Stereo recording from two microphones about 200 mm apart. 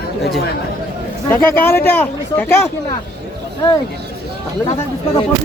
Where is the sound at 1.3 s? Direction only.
10° left (ahead or behind).